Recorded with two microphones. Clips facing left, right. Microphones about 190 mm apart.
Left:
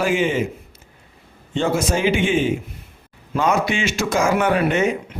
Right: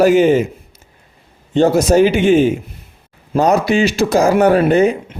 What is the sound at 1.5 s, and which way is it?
Speech, 40° right (ahead or behind).